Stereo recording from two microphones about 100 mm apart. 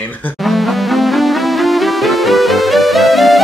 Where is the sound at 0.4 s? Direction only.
Centre (ahead or behind).